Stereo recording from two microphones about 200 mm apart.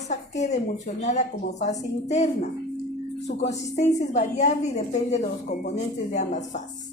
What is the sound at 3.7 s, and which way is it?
A woman's voice, 35° left (ahead or behind).